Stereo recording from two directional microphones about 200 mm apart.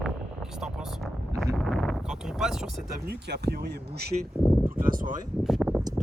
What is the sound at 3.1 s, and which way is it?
Speech, 55° right (ahead or behind).